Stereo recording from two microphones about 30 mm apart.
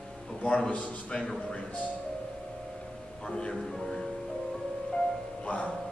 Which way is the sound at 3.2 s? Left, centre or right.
Left.